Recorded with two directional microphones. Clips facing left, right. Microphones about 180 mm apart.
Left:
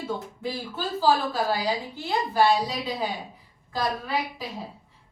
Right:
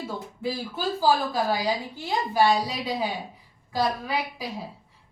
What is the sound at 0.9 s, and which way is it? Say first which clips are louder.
Speech: left 1 dB; 15° right (ahead or behind).